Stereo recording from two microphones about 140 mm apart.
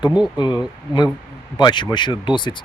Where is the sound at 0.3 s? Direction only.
30° left (ahead or behind).